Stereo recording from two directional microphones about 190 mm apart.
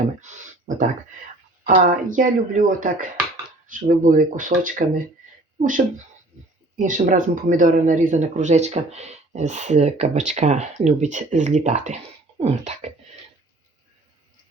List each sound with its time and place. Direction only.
0.2 s speech: 40° right (ahead or behind)
6.7 s speech: 45° right (ahead or behind)